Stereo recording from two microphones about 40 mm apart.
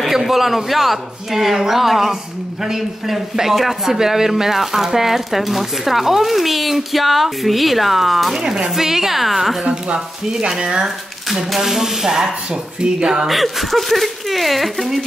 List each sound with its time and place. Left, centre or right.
0.0 s a man's voice: centre
8.4 s speech: centre
11.5 s speech: centre
13.3 s a man's voice: centre